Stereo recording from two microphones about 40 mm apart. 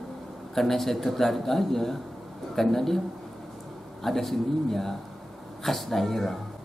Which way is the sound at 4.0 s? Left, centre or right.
Centre.